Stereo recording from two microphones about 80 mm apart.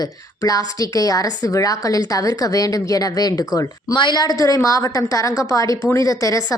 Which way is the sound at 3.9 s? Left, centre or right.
Left.